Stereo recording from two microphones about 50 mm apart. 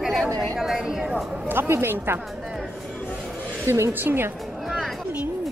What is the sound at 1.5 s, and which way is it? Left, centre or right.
Speech, right.